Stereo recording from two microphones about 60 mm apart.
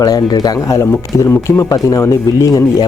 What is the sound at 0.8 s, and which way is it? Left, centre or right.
Speech, left.